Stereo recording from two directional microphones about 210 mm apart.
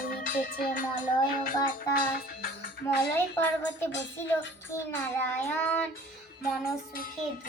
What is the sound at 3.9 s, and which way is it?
Speech, 60° left (ahead or behind).